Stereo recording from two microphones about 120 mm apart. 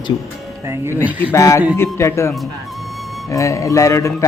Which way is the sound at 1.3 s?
25° left (ahead or behind).